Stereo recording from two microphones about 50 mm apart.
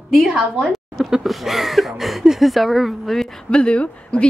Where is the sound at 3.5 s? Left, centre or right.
Left.